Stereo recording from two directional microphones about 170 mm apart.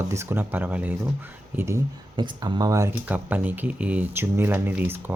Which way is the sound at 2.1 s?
25° right (ahead or behind).